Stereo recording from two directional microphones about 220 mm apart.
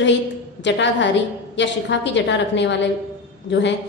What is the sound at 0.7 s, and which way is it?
A woman's voice, 55° left (ahead or behind).